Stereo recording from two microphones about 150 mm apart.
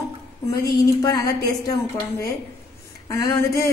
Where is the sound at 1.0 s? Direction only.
25° left (ahead or behind).